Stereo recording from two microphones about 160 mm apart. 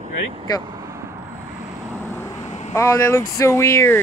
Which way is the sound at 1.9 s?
15° left (ahead or behind).